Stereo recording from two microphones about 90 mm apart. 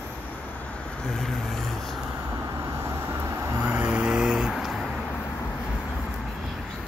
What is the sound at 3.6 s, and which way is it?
Vehicle, 15° right (ahead or behind).